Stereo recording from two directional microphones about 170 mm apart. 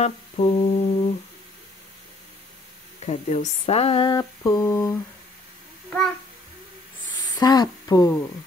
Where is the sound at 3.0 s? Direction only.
40° left (ahead or behind); by 5.0 s 20° left (ahead or behind).